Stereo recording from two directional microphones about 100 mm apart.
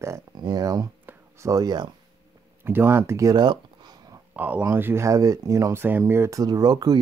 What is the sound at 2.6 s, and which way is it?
Speech, 25° right (ahead or behind).